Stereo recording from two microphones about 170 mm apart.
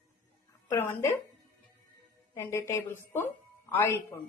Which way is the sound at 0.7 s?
15° left (ahead or behind).